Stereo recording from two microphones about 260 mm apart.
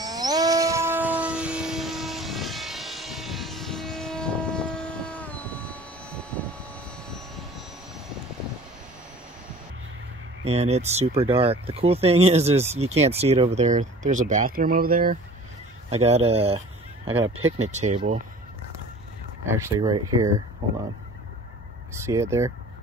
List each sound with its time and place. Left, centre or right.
0.0 s a sound: centre
10.4 s speech: right
17.0 s speech: right
17.6 s speech: right
19.4 s speech: centre
21.9 s speech: centre